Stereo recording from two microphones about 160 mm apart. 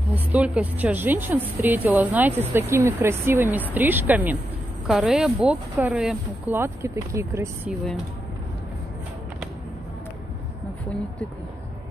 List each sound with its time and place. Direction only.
0.1 s speech: 10° right (ahead or behind)